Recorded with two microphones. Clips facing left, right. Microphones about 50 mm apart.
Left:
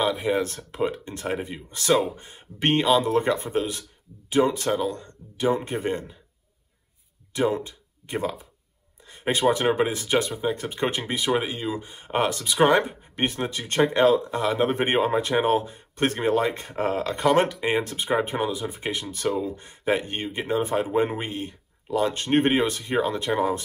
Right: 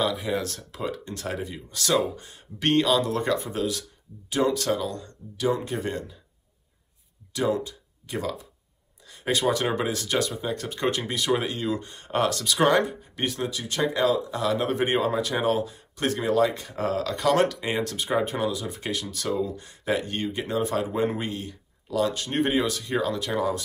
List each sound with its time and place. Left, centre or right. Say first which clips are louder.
0.2 s speech: left 4 dB; left
7.3 s speech: left 1 dB; left
14.4 s speech: left 2 dB; left